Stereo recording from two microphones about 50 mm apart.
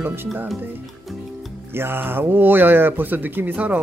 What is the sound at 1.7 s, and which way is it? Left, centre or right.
Speech, right.